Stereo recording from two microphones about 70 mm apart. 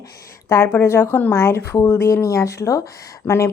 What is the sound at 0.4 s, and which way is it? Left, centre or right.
Speech, left.